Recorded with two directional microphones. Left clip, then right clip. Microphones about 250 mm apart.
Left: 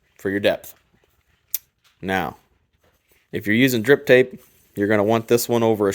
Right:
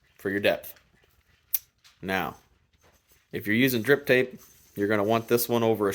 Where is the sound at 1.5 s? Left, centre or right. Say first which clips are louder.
Left 5 dB; left.